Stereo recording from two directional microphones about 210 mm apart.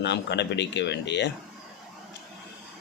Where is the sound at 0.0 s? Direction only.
55° left (ahead or behind).